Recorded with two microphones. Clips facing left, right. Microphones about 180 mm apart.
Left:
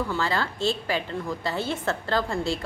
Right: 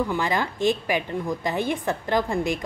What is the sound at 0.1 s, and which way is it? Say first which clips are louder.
A woman's voice: right 2 dB; 15° right (ahead or behind).